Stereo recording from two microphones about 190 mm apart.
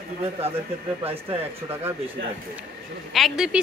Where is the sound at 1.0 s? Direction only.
30° right (ahead or behind).